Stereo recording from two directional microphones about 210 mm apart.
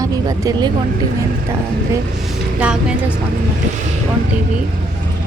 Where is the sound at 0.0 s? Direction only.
15° right (ahead or behind).